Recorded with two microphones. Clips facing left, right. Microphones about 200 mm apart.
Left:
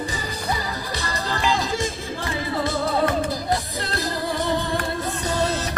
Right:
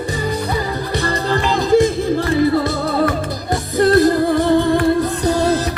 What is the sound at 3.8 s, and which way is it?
Music, 50° right (ahead or behind).